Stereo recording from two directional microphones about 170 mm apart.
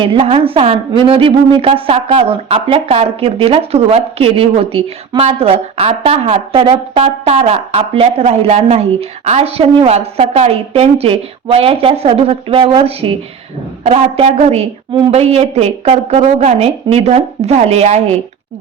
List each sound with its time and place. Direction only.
0.0 s a woman's voice: 30° right (ahead or behind)